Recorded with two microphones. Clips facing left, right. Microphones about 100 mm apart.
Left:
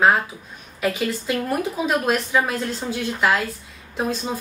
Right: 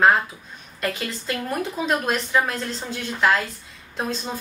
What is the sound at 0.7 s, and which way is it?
A woman's voice, 5° left (ahead or behind).